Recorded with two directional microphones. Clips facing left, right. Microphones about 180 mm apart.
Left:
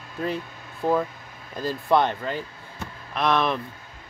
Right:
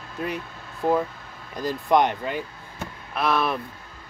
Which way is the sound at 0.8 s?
20° right (ahead or behind).